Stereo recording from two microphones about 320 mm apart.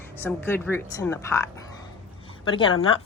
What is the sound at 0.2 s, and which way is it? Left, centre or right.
A woman's voice, centre.